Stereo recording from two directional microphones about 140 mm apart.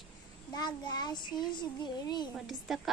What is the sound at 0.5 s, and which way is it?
A child's voice, 30° left (ahead or behind).